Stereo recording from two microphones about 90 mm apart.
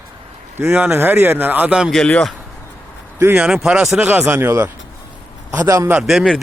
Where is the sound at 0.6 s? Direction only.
25° right (ahead or behind).